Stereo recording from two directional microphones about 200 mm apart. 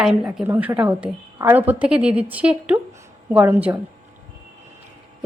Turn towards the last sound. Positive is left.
turn(degrees=-10)  # may be behind; listen again after turning